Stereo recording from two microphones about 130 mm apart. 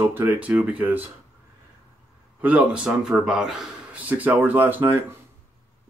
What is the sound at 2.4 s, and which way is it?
A man's voice, 10° right (ahead or behind).